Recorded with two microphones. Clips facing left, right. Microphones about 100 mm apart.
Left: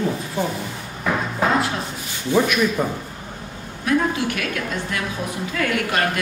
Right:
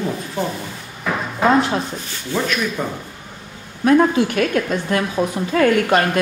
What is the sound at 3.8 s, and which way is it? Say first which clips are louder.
A woman's voice: right 6 dB; 40° right (ahead or behind).